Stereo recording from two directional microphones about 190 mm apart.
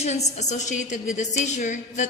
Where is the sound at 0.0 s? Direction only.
35° left (ahead or behind).